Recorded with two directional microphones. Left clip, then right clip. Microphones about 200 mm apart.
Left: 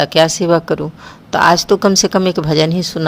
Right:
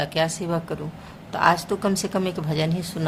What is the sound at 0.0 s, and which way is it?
A woman's voice, 40° left (ahead or behind).